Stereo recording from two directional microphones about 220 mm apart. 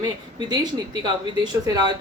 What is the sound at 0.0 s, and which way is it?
A woman's voice, 20° right (ahead or behind).